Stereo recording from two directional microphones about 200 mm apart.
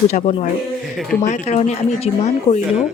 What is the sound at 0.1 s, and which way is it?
Speech, 35° left (ahead or behind).